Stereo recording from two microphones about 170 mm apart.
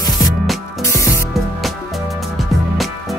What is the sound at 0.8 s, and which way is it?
Spray, 20° left (ahead or behind).